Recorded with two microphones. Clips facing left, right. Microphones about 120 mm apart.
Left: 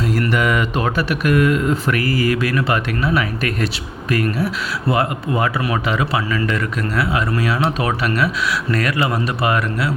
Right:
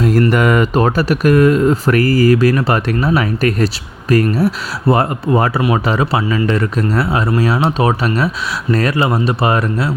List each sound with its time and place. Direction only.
0.0 s speech: 45° right (ahead or behind)